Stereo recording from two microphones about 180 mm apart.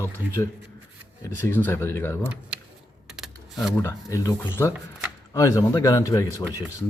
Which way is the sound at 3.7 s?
15° left (ahead or behind).